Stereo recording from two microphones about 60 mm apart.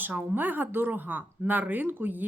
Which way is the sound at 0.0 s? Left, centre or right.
Right.